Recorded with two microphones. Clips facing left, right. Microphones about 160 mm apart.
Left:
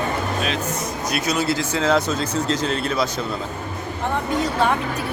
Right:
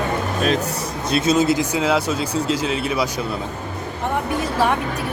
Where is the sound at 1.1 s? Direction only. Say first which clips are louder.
Right 6 dB; 25° right (ahead or behind); by 3.1 s 10° right (ahead or behind).